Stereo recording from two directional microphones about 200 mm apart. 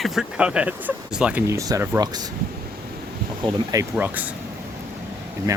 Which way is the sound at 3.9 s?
10° right (ahead or behind).